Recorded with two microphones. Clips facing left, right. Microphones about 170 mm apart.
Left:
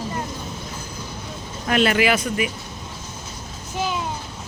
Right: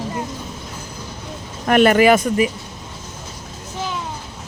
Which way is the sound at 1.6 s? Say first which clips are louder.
Right 6 dB; 50° right (ahead or behind).